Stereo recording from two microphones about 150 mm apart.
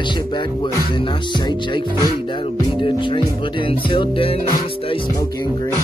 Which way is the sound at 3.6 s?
35° left (ahead or behind).